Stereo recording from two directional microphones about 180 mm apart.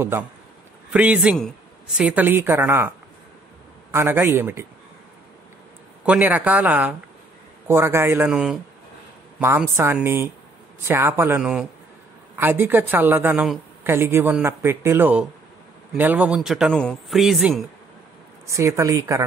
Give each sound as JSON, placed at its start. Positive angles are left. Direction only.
{"t": 0.9, "sound": "a man's voice", "side_deg": -5}
{"t": 3.9, "sound": "a woman's voice", "side_deg": -10}
{"t": 6.0, "sound": "a woman's voice", "side_deg": -10}
{"t": 18.5, "sound": "a woman's voice", "side_deg": -15}